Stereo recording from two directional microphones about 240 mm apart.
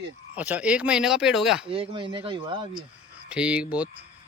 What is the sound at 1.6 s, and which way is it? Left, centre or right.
Speech, right.